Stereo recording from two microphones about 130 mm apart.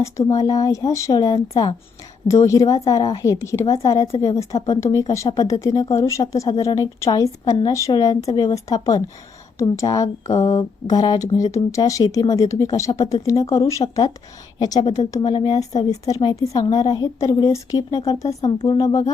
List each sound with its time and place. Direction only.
0.0 s a woman's voice: 25° left (ahead or behind); by 15.6 s 45° left (ahead or behind)
15.9 s a woman's voice: 25° left (ahead or behind)